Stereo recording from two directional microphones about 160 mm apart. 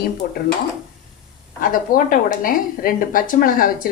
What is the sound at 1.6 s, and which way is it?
A woman's voice, 60° left (ahead or behind).